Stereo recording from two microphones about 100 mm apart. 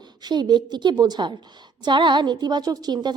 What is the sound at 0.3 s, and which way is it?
Speech, 45° right (ahead or behind).